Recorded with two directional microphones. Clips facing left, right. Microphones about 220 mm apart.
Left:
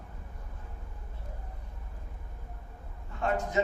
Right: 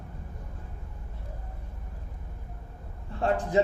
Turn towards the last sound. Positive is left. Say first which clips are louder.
# right 4 dB
turn(degrees=-30)  # may be behind; listen again after turning